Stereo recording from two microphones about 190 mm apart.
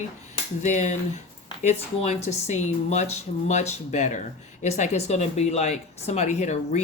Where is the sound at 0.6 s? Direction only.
40° left (ahead or behind).